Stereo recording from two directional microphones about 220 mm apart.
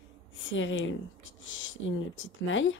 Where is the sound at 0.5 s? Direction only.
60° left (ahead or behind).